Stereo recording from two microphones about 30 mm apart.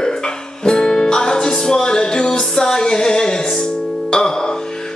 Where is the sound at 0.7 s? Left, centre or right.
Left.